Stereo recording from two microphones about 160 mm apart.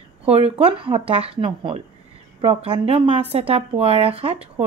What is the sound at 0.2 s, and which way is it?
Speech, 40° right (ahead or behind).